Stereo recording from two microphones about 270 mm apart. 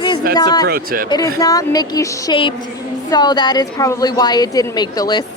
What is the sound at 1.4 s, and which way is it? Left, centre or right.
A woman's voice, centre.